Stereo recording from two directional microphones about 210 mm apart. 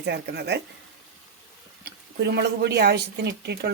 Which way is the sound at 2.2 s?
55° right (ahead or behind).